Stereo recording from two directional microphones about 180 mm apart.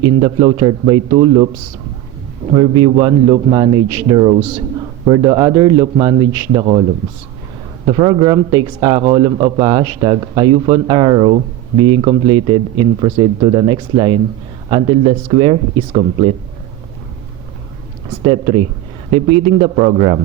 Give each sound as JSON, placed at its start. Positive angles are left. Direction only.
{"t": 0.0, "sound": "speech", "side_deg": -25}
{"t": 2.6, "sound": "speech", "side_deg": -30}
{"t": 7.9, "sound": "speech", "side_deg": -25}
{"t": 18.3, "sound": "speech", "side_deg": -30}